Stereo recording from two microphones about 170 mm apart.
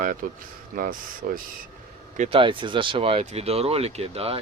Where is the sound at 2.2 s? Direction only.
30° right (ahead or behind).